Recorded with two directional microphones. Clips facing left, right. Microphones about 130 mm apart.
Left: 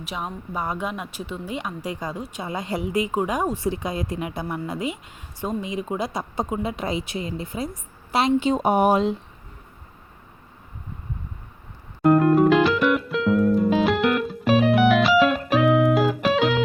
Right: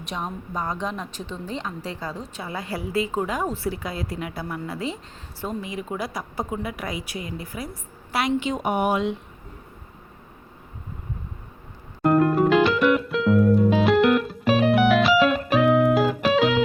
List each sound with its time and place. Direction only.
0.0 s a woman's voice: 5° left (ahead or behind); by 9.1 s 35° left (ahead or behind)
12.0 s music: centre (ahead or behind)